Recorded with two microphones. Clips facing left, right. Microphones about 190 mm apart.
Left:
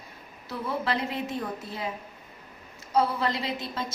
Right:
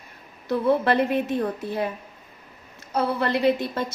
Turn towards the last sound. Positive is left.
turn(degrees=-60)  # may be behind; listen again after turning